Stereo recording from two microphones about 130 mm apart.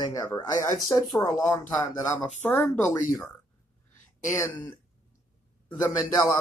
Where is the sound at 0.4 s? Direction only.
25° left (ahead or behind).